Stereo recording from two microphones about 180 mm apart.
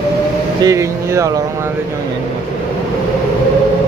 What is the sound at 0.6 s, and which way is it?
Speech, 15° right (ahead or behind).